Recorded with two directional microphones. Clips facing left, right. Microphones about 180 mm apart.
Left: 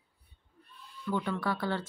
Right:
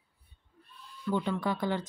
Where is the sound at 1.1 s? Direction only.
20° right (ahead or behind).